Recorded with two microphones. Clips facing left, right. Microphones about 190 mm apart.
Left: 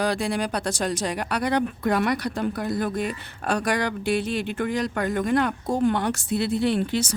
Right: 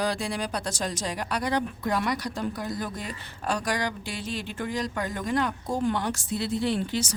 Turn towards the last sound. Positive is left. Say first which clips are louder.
# left 4 dB
turn(degrees=60)  # may be behind; listen again after turning